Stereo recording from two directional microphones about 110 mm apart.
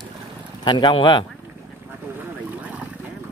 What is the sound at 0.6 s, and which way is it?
Speech, 45° left (ahead or behind).